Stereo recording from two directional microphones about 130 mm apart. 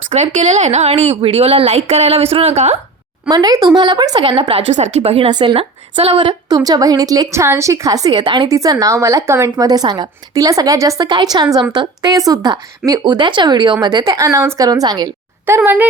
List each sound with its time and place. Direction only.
0.1 s speech: 65° right (ahead or behind)
3.2 s speech: 30° right (ahead or behind)
4.7 s speech: 60° right (ahead or behind)
5.3 s a woman's voice: 35° right (ahead or behind)
15.4 s speech: 15° right (ahead or behind)